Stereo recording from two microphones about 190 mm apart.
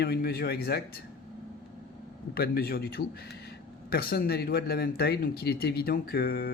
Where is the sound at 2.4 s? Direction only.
55° left (ahead or behind).